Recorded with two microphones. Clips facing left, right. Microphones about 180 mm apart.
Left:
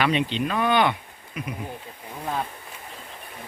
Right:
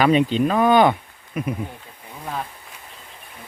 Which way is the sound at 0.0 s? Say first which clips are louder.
Right 6 dB; 40° right (ahead or behind).